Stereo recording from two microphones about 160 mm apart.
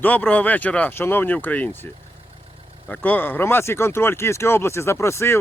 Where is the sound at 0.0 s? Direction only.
10° left (ahead or behind).